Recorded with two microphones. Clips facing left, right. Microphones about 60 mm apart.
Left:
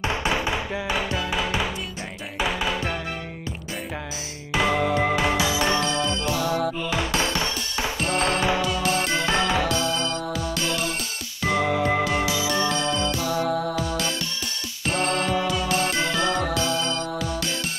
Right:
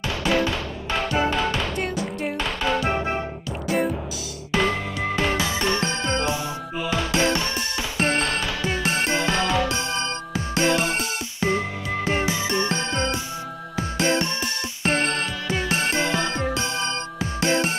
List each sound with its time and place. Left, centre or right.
0.2 s music: left
4.5 s music: centre
4.7 s music: left
5.0 s music: centre
5.8 s music: right
6.2 s music: right
6.9 s music: left
8.6 s music: right
9.3 s music: left
9.7 s music: right
11.6 s music: left
12.0 s music: right
15.1 s music: left
15.4 s music: right